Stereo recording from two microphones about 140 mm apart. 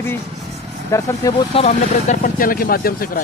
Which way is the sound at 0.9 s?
25° left (ahead or behind).